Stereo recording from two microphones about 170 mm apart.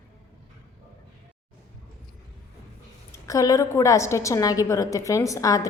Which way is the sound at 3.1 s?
20° left (ahead or behind).